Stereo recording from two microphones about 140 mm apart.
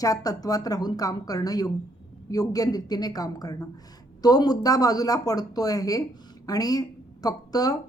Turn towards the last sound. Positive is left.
turn(degrees=25)  # may be behind; listen again after turning